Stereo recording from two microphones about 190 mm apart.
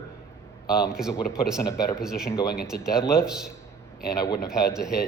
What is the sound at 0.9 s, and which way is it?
Speech, 5° right (ahead or behind).